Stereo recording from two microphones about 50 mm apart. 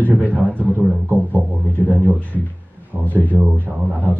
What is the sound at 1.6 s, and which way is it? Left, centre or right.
Speech, left.